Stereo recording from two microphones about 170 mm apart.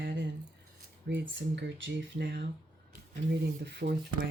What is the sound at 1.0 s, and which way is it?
Speech, 90° right.